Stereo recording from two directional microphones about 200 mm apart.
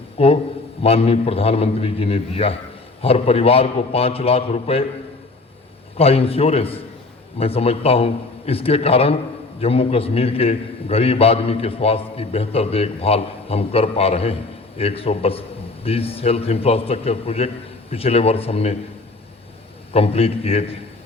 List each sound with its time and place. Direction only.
0.2 s a man's voice: 30° left (ahead or behind)
6.0 s a man's voice: 30° left (ahead or behind)
19.9 s a man's voice: 30° left (ahead or behind)